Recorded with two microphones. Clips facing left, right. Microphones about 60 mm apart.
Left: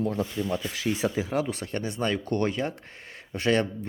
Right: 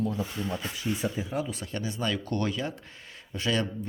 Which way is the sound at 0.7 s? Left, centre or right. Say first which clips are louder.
Left 4 dB; left.